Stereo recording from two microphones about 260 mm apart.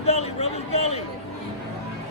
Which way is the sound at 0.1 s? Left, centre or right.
Left.